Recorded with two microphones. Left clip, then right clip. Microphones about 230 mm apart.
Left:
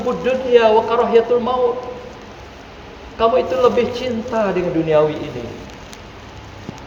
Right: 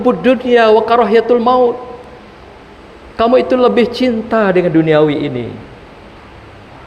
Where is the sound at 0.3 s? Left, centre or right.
Right.